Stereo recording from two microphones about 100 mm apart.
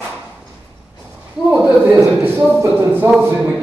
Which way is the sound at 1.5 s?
10° right (ahead or behind).